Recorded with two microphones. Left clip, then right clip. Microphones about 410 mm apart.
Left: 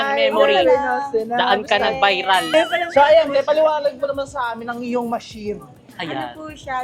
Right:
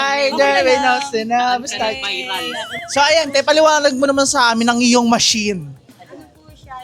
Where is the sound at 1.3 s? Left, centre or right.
Left.